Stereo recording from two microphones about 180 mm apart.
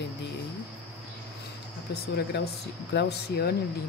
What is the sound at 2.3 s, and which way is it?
Speech, 65° left (ahead or behind).